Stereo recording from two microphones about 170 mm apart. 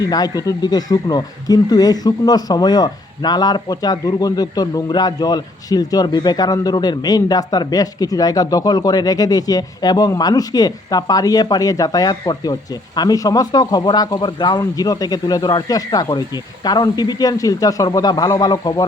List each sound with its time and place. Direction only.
0.0 s speech: 20° left (ahead or behind)